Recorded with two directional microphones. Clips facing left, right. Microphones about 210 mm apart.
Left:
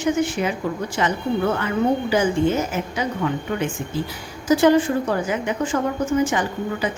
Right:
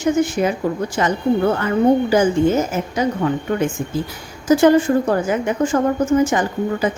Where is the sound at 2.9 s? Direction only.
40° right (ahead or behind).